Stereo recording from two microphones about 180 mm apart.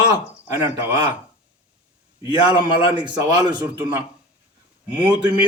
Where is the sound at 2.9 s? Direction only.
25° right (ahead or behind).